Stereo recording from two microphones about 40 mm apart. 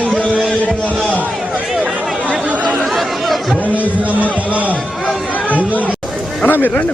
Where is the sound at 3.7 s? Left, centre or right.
Right.